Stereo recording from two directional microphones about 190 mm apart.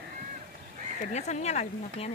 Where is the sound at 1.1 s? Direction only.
35° left (ahead or behind).